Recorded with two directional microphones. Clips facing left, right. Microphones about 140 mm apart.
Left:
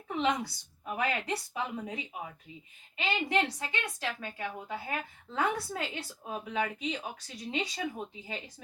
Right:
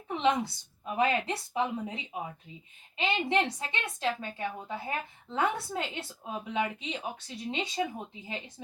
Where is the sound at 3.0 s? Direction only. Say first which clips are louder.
Right 2 dB; 25° right (ahead or behind).